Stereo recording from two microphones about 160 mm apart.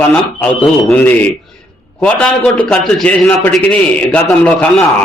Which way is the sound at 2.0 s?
10° left (ahead or behind).